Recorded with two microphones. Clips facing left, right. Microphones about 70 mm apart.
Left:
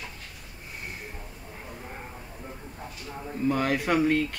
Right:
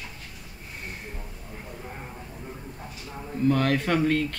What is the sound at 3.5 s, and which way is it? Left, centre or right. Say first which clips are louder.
Speech: right 1 dB; centre.